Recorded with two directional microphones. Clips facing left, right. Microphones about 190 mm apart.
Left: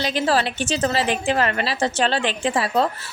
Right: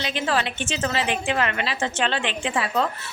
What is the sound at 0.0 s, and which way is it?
A woman's voice, 35° left (ahead or behind).